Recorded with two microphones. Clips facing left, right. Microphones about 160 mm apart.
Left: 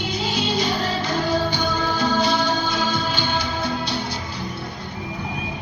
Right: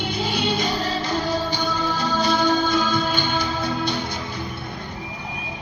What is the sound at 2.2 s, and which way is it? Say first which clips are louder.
Music: right 2 dB; 50° right (ahead or behind).